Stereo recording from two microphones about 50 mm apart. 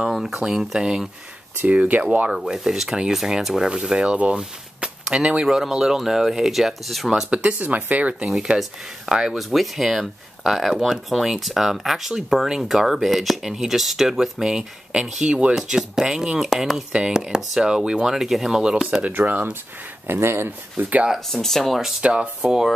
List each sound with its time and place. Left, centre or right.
0.1 s speech: centre
1.6 s speech: right
2.0 s speech: right
2.3 s speech: centre
7.2 s speech: right
9.4 s speech: centre
19.0 s speech: right
20.1 s speech: right
20.7 s speech: right
21.3 s speech: centre
22.0 s speech: right
22.4 s speech: centre